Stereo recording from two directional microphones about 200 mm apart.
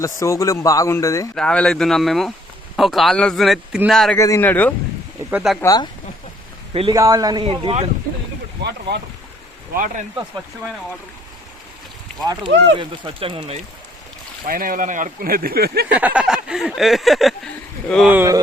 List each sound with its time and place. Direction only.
0.0 s speech: 15° left (ahead or behind)
1.4 s a sound: 5° left (ahead or behind)
4.2 s speech: 15° left (ahead or behind)
5.3 s a sound: 5° right (ahead or behind)
5.5 s speech: 20° left (ahead or behind)
6.9 s speech: 15° right (ahead or behind)
9.7 s speech: 40° right (ahead or behind)
12.5 s speech: 60° right (ahead or behind)
12.8 s speech: 25° right (ahead or behind)
14.4 s speech: 45° right (ahead or behind)
15.9 s a sound: 5° right (ahead or behind)
18.1 s speech: 10° right (ahead or behind)